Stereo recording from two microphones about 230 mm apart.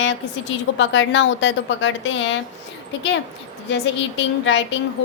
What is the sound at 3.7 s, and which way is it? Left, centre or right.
Speech, left.